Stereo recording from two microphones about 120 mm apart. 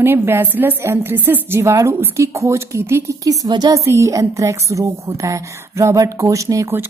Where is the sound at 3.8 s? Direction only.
25° right (ahead or behind).